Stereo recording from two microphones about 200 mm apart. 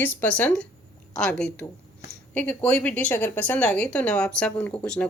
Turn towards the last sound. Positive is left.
turn(degrees=5)  # may be behind; listen again after turning